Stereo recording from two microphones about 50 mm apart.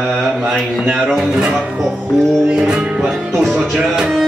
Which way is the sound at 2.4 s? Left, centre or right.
Centre.